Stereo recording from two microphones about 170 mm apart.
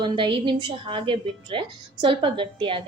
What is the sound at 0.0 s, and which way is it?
A woman's voice, 30° right (ahead or behind).